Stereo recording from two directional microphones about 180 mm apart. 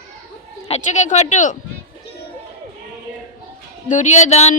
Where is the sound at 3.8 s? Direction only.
45° left (ahead or behind).